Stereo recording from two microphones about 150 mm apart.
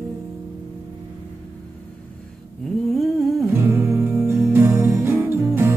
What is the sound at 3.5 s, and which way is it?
Music, 15° right (ahead or behind).